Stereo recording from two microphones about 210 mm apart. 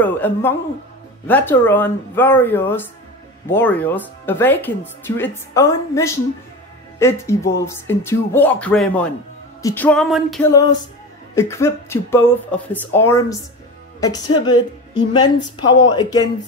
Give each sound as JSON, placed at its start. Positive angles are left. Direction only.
{"t": 0.0, "sound": "speech", "side_deg": 10}
{"t": 9.6, "sound": "music", "side_deg": 10}
{"t": 11.3, "sound": "speech", "side_deg": 15}
{"t": 14.4, "sound": "a sound", "side_deg": 20}